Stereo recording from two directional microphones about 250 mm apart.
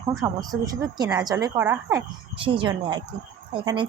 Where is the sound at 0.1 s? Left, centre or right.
Centre.